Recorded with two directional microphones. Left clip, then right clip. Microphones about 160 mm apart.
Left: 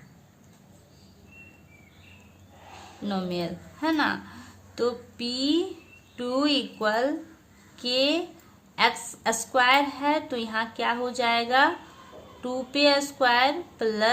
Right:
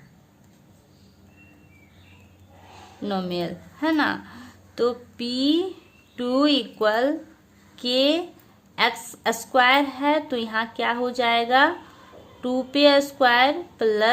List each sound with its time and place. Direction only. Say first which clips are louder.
3.0 s a woman's voice: right 3 dB; 35° right (ahead or behind)